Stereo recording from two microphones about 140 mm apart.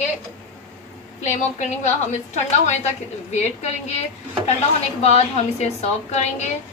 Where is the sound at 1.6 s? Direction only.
55° left (ahead or behind).